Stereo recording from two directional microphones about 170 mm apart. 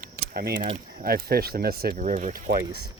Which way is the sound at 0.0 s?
65° right (ahead or behind).